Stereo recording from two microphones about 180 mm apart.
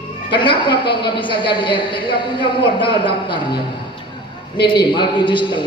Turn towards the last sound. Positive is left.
turn(degrees=25)  # may be behind; listen again after turning